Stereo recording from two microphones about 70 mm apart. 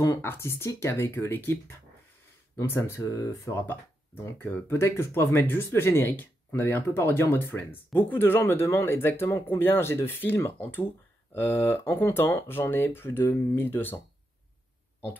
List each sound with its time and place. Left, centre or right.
0.2 s speech: left
3.0 s speech: left
4.4 s speech: left
4.7 s speech: left